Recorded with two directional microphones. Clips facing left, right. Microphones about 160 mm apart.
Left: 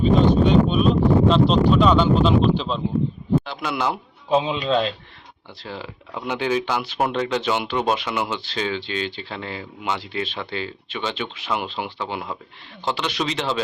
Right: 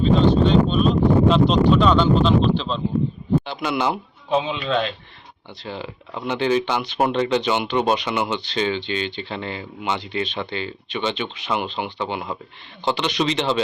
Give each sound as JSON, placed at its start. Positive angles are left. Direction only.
{"t": 0.0, "sound": "speech", "side_deg": 10}
{"t": 4.4, "sound": "speech", "side_deg": 35}
{"t": 5.6, "sound": "speech", "side_deg": 0}